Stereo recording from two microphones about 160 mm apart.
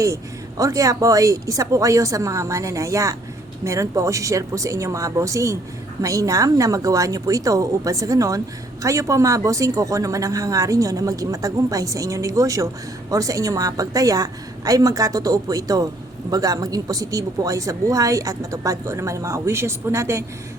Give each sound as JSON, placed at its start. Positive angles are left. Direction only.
{"t": 0.0, "sound": "speech", "side_deg": -20}